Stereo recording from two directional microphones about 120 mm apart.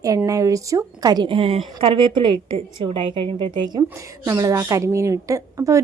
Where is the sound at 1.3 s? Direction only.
50° right (ahead or behind).